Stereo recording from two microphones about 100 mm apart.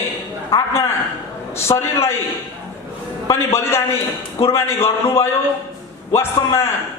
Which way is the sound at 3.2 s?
30° left (ahead or behind).